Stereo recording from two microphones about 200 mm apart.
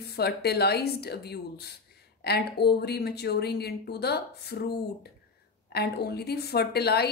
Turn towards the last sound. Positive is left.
turn(degrees=55)  # may be behind; listen again after turning